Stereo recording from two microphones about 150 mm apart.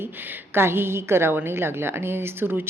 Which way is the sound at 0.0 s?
15° right (ahead or behind).